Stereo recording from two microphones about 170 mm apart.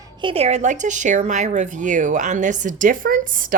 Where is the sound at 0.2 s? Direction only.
35° right (ahead or behind).